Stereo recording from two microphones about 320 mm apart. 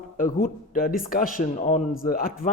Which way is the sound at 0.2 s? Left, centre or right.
Left.